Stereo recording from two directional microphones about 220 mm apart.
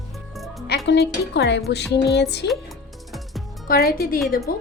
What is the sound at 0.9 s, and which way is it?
Speech, 50° left (ahead or behind).